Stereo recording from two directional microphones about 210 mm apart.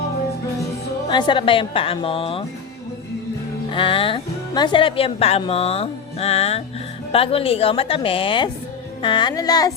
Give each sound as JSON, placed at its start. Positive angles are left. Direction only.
{"t": 1.0, "sound": "speech", "side_deg": 20}
{"t": 3.7, "sound": "speech", "side_deg": 25}